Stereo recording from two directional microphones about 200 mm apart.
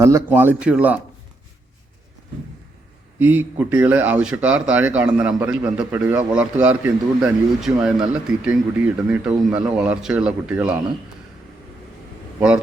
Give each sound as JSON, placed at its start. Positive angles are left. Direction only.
{"t": 0.0, "sound": "speech", "side_deg": -10}
{"t": 3.2, "sound": "a man's voice", "side_deg": -10}